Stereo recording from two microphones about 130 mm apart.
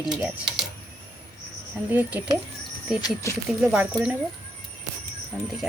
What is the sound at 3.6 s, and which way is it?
Speech, 15° right (ahead or behind).